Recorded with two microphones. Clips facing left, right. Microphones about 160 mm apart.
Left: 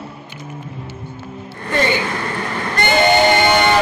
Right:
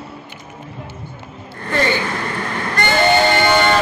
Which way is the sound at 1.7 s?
15° left (ahead or behind).